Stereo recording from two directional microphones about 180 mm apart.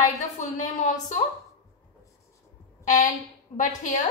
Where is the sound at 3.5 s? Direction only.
45° left (ahead or behind).